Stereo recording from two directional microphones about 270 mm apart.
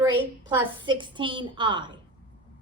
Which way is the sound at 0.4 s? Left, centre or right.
Centre.